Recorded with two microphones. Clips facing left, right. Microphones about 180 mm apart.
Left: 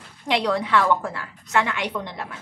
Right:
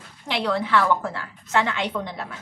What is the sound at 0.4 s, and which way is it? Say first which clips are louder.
A woman's voice: right 1 dB; 15° left (ahead or behind).